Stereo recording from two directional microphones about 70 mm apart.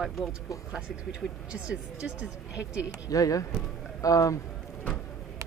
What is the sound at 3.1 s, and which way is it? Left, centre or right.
Speech, left.